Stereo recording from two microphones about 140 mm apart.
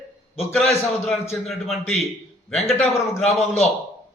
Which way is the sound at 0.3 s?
Centre (ahead or behind).